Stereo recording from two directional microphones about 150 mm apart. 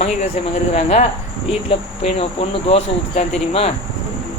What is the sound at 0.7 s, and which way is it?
Speech, 50° left (ahead or behind).